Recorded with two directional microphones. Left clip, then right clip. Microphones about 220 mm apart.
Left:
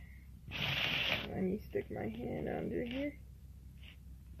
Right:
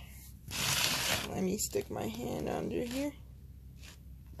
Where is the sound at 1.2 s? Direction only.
15° right (ahead or behind).